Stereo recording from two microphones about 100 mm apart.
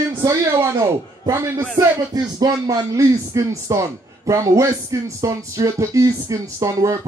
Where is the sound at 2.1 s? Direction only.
40° right (ahead or behind).